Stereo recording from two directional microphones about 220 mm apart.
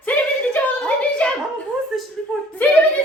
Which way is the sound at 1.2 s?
5° left (ahead or behind).